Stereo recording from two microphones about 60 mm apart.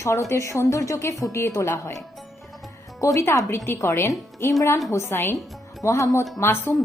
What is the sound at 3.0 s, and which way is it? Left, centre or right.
Speech, left.